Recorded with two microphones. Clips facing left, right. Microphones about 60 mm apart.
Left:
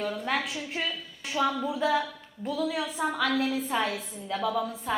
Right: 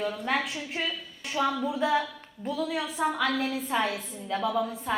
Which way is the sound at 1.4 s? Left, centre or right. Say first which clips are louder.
Even; centre.